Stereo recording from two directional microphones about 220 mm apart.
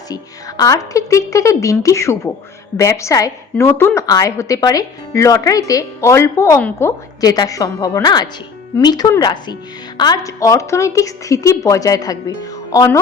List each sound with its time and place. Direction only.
0.1 s a woman's voice: 15° left (ahead or behind)